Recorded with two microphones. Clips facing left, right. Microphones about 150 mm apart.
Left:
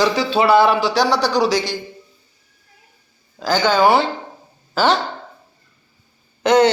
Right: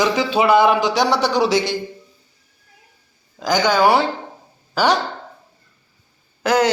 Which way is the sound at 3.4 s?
15° right (ahead or behind).